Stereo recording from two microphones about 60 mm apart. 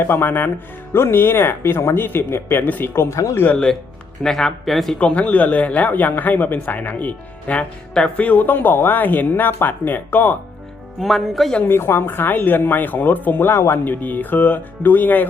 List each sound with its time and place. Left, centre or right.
0.0 s speech: left
4.2 s speech: centre
4.9 s a man's voice: left
11.0 s speech: centre
11.6 s speech: left